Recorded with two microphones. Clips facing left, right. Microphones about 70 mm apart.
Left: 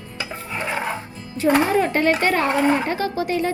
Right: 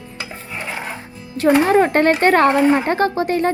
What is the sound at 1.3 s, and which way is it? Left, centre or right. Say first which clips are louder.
A woman's voice: right 4 dB; right.